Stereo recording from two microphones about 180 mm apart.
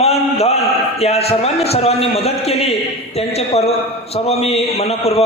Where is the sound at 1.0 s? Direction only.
35° left (ahead or behind).